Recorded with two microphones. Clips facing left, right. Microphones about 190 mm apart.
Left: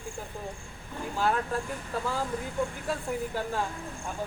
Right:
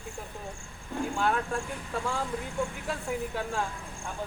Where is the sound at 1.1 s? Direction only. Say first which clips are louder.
Left 2 dB; 5° left (ahead or behind).